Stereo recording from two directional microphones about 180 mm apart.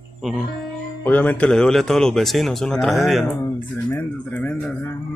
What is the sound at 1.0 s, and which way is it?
Speech, 10° left (ahead or behind).